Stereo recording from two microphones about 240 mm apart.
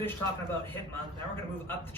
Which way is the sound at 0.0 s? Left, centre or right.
Centre.